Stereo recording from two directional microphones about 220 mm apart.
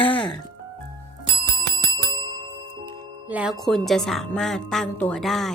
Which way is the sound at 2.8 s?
5° right (ahead or behind).